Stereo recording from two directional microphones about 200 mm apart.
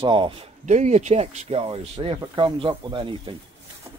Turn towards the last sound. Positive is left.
turn(degrees=-25)  # may be behind; listen again after turning